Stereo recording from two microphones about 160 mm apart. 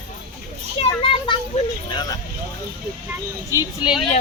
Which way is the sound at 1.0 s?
35° left (ahead or behind).